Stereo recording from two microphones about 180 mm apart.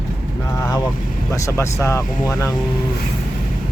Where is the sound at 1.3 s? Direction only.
15° left (ahead or behind).